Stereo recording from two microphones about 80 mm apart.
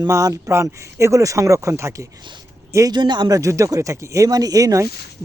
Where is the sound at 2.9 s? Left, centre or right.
Right.